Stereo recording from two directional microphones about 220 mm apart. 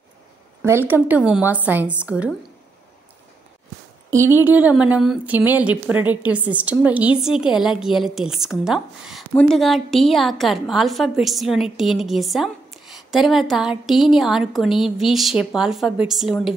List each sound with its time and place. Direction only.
0.6 s a woman's voice: 10° right (ahead or behind)
4.5 s a woman's voice: 5° right (ahead or behind)